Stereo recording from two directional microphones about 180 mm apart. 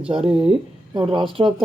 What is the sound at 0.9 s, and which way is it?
Speech, 30° right (ahead or behind).